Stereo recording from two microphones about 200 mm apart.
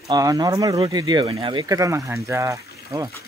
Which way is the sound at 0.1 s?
15° right (ahead or behind).